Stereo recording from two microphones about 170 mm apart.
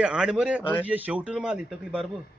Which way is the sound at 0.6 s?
10° left (ahead or behind).